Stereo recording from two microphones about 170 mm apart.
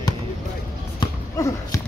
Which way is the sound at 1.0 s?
20° left (ahead or behind).